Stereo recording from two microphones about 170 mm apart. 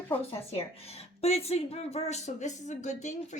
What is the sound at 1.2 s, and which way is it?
A woman's voice, 40° left (ahead or behind).